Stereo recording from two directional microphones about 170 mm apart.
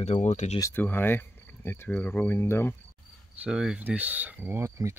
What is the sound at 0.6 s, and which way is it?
Speech, 15° left (ahead or behind).